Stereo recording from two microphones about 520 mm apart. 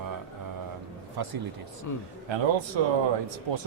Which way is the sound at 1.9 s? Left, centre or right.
Left.